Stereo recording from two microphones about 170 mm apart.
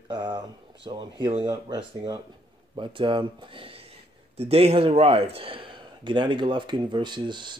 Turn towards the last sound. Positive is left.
turn(degrees=-25)  # may be behind; listen again after turning